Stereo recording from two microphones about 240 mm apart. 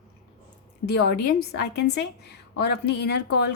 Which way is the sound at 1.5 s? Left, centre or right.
Left.